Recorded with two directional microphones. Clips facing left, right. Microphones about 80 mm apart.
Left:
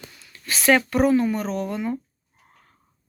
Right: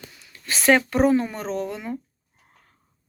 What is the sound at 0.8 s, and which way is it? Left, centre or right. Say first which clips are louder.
Speech: left 1 dB; right.